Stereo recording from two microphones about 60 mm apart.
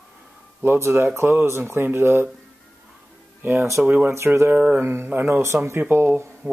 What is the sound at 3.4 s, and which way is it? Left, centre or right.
Speech, right.